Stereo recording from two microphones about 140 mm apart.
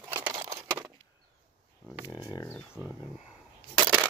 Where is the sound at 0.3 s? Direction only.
25° right (ahead or behind).